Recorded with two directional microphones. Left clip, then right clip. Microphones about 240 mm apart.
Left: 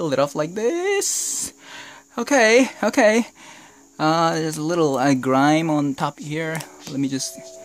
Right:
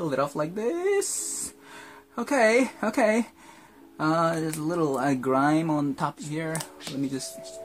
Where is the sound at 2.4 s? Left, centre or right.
Left.